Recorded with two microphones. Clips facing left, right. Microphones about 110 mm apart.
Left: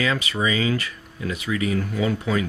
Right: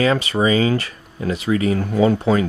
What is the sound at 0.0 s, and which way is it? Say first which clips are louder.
Speech: right 6 dB; 35° right (ahead or behind).